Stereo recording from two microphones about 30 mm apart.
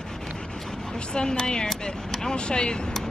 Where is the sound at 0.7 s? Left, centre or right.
Left.